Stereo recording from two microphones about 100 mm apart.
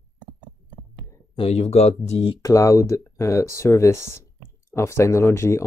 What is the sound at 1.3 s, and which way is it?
Speech, 85° left.